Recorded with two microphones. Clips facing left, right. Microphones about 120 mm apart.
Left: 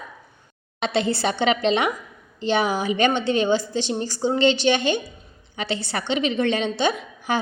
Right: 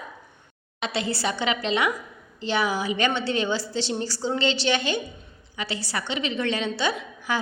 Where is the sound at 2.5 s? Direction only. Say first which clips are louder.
Left 3 dB; 20° left (ahead or behind).